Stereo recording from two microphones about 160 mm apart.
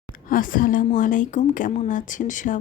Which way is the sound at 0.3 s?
60° left (ahead or behind).